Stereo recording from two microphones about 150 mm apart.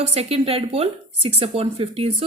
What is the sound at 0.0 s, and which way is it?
Speech, 45° right (ahead or behind).